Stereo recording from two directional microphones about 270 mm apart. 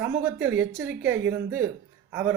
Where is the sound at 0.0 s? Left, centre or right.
Centre.